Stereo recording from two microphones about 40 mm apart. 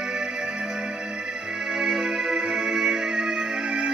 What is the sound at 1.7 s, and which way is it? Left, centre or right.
Music, centre.